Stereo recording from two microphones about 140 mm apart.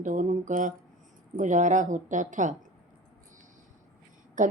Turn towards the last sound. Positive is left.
turn(degrees=-70)  # may be behind; listen again after turning